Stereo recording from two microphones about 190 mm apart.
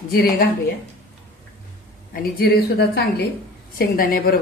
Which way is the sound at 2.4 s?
60° left (ahead or behind).